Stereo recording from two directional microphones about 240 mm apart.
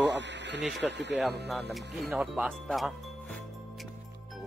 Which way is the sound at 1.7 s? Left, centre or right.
Centre.